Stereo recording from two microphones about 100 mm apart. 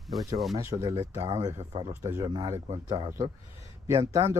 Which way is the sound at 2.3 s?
40° right (ahead or behind).